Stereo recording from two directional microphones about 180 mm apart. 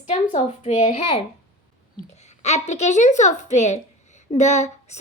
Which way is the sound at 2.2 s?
40° left (ahead or behind).